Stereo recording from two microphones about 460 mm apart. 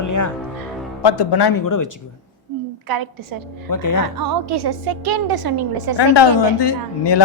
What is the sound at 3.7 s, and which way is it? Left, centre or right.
Speech, left.